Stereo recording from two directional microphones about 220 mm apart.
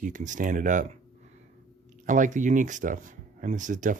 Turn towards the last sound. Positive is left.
turn(degrees=-35)  # may be behind; listen again after turning